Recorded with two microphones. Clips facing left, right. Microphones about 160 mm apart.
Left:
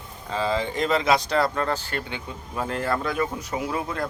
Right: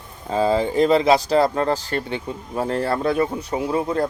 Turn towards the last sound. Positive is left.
turn(degrees=-30)  # may be behind; listen again after turning